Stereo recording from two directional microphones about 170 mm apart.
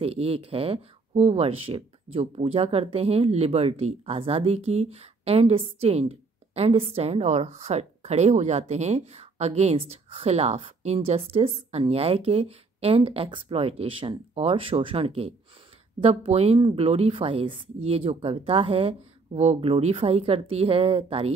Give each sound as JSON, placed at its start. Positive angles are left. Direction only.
{"t": 0.0, "sound": "speech", "side_deg": -35}